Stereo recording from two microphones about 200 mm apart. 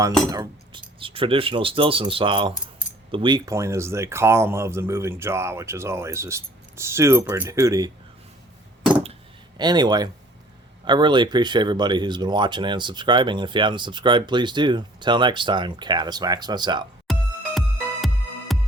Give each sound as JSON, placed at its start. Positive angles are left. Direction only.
{"t": 0.3, "sound": "speech", "side_deg": -20}
{"t": 9.6, "sound": "speech", "side_deg": -20}
{"t": 17.1, "sound": "music", "side_deg": 0}
{"t": 18.5, "sound": "music", "side_deg": 0}